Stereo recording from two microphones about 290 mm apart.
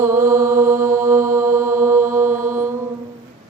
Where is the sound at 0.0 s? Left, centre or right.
Centre.